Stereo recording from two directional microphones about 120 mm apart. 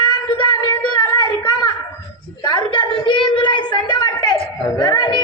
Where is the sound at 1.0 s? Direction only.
40° left (ahead or behind).